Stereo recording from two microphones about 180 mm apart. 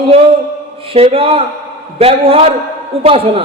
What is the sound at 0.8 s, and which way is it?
A man's voice, 30° right (ahead or behind).